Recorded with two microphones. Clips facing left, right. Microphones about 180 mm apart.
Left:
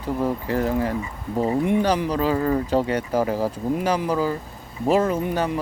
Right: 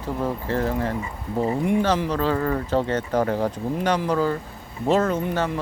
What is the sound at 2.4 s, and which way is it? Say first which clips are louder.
Speech: left 3 dB; 25° left (ahead or behind).